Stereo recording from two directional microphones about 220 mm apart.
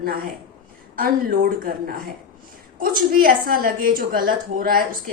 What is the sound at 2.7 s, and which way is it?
A woman's voice, 40° right (ahead or behind).